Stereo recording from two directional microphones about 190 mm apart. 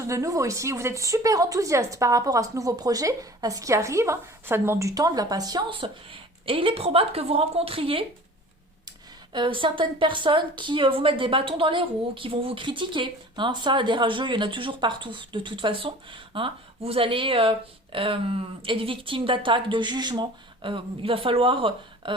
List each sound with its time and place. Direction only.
0.1 s speech: 15° right (ahead or behind)
9.3 s a woman's voice: 25° right (ahead or behind)